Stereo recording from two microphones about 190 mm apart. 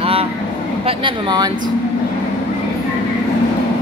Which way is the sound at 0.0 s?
30° right (ahead or behind).